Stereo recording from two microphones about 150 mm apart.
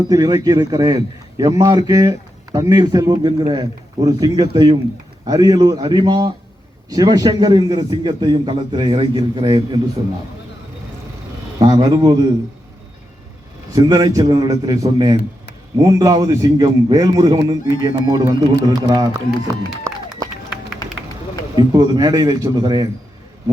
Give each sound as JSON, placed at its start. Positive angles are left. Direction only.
{"t": 0.1, "sound": "a man's voice", "side_deg": -25}
{"t": 11.6, "sound": "a man's voice", "side_deg": -30}
{"t": 13.7, "sound": "a man's voice", "side_deg": -25}
{"t": 21.5, "sound": "a man's voice", "side_deg": -25}